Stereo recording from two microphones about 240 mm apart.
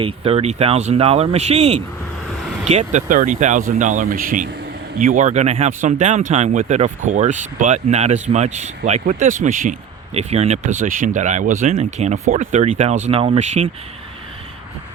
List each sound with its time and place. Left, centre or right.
0.0 s speech: right